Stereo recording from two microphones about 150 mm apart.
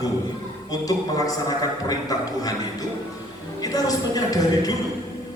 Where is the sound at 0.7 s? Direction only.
25° left (ahead or behind).